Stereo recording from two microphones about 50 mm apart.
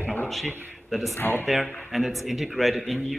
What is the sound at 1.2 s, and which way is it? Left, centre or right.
Speech, left.